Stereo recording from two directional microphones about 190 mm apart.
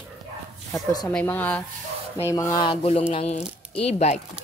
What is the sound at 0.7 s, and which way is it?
A woman's voice, 10° left (ahead or behind).